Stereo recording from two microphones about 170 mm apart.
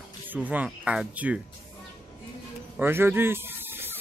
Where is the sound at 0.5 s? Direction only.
10° right (ahead or behind).